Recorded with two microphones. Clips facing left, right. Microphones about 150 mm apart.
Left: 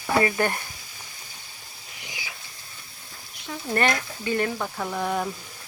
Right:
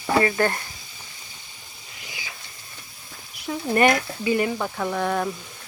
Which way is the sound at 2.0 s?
15° left (ahead or behind).